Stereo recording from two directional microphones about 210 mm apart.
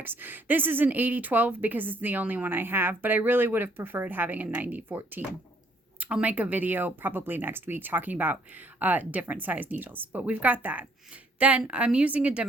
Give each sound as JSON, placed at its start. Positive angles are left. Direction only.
{"t": 0.0, "sound": "speech", "side_deg": -10}